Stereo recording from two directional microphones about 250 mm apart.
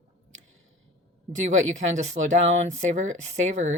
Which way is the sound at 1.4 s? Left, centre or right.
Right.